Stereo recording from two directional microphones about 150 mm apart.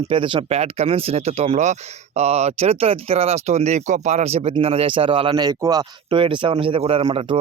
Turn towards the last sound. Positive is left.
turn(degrees=-40)  # may be behind; listen again after turning